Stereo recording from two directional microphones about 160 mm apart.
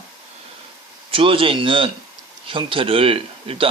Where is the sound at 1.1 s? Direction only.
35° right (ahead or behind).